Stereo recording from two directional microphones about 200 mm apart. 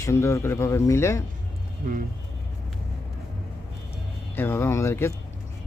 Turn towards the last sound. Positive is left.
turn(degrees=10)  # may be behind; listen again after turning